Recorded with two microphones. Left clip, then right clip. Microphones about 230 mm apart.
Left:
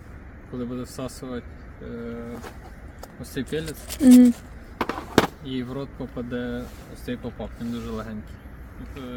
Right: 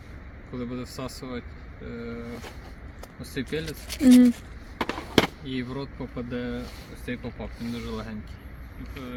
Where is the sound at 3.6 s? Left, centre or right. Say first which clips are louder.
Left 3 dB; centre.